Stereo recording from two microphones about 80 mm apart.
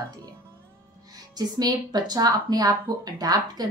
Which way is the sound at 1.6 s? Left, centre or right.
Right.